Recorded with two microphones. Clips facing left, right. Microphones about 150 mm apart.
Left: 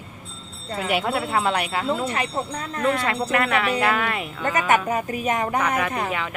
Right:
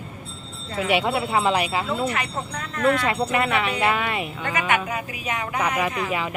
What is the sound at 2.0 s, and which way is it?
Speech, 30° left (ahead or behind).